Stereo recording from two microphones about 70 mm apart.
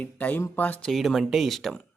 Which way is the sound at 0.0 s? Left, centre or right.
Left.